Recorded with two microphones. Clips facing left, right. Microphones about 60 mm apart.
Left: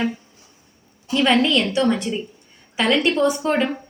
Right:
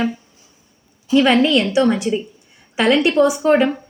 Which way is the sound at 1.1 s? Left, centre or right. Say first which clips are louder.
Right 4 dB; centre.